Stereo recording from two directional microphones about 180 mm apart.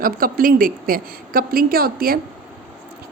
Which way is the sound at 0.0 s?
50° right (ahead or behind).